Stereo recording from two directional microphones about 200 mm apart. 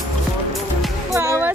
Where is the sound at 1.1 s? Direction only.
10° right (ahead or behind).